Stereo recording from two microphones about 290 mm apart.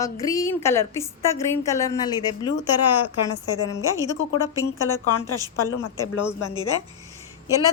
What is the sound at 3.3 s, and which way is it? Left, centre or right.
Speech, left.